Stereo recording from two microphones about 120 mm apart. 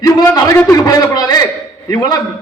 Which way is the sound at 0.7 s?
30° left (ahead or behind).